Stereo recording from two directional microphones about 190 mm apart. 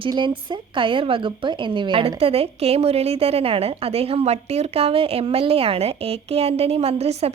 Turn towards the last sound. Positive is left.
turn(degrees=-35)  # may be behind; listen again after turning